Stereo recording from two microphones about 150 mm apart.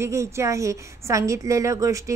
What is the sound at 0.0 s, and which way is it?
A woman's voice, 20° right (ahead or behind).